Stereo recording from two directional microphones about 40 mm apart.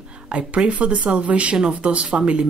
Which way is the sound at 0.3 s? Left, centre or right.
Right.